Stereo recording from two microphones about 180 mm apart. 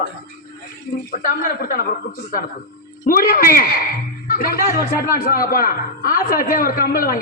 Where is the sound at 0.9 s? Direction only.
50° left (ahead or behind).